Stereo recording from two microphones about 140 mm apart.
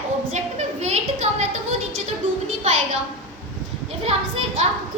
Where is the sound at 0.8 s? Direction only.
50° right (ahead or behind).